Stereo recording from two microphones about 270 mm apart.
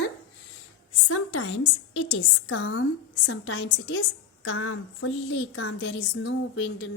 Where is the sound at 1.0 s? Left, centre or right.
Left.